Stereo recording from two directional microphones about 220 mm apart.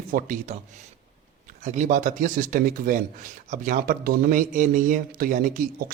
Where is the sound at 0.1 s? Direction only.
40° right (ahead or behind).